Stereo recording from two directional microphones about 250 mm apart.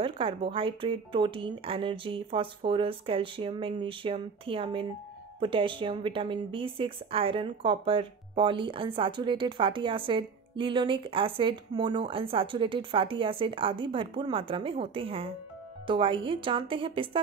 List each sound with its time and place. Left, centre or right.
0.0 s speech: right